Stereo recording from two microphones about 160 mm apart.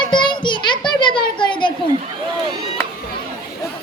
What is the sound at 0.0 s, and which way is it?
Children playing, 30° left (ahead or behind).